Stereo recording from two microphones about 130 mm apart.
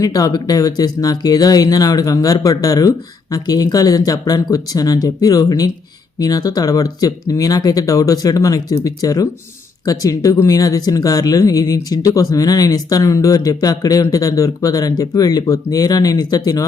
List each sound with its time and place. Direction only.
0.0 s speech: 30° left (ahead or behind)